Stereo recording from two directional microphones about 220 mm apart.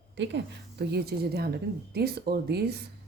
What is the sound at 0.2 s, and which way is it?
Speech, 55° right (ahead or behind).